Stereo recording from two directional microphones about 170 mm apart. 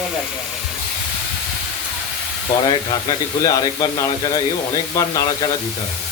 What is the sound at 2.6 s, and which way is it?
Speech, 20° left (ahead or behind).